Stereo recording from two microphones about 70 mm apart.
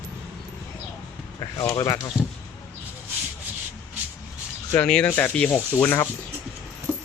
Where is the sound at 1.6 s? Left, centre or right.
Left.